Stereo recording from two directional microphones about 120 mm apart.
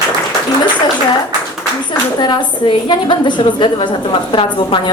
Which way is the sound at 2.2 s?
40° left (ahead or behind).